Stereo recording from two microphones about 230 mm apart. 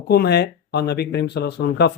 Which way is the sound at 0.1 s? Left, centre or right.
Left.